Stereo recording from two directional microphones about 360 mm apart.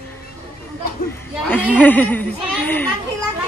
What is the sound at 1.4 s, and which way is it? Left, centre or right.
Speech, centre.